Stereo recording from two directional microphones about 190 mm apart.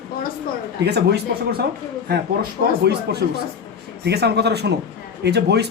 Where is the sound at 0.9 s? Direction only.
60° right (ahead or behind).